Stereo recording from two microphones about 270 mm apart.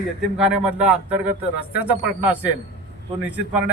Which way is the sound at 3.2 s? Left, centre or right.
Centre.